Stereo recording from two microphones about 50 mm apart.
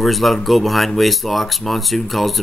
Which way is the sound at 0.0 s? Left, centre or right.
Centre.